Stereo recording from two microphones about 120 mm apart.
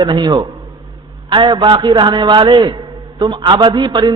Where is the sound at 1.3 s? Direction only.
45° right (ahead or behind).